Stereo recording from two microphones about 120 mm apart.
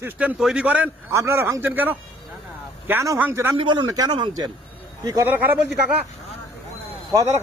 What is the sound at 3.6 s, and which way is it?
A man's voice, 40° right (ahead or behind).